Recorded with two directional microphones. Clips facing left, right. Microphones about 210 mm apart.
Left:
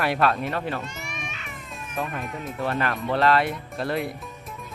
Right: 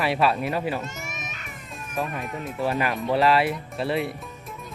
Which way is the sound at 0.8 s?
45° right (ahead or behind).